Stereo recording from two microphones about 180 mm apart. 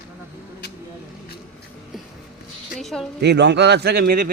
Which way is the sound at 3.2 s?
75° right (ahead or behind).